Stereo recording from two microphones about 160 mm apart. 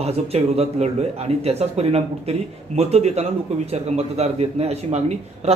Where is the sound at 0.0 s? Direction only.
40° right (ahead or behind).